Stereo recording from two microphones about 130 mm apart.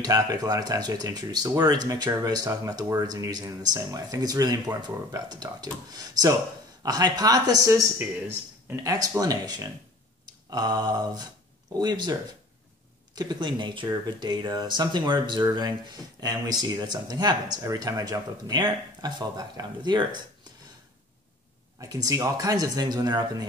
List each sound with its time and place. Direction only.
0.0 s speech: 30° right (ahead or behind)
1.9 s speech: 20° right (ahead or behind)
2.2 s speech: 30° right (ahead or behind)
2.8 s speech: 15° right (ahead or behind)
3.1 s speech: 30° right (ahead or behind)
8.8 s speech: 25° right (ahead or behind)
21.7 s speech: 25° right (ahead or behind)